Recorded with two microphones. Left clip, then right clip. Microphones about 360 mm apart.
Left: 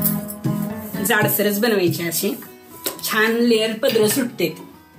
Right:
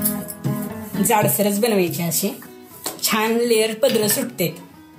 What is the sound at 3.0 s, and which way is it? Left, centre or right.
Speech, right.